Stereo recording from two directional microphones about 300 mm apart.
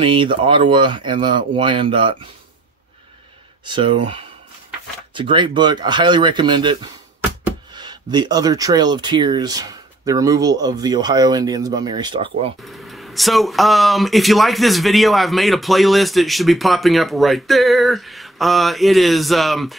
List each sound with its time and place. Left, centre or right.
0.0 s speech: centre
3.6 s speech: centre
12.6 s speech: centre